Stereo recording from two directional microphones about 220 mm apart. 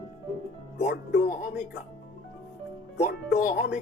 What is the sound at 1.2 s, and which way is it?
Speech, 35° left (ahead or behind).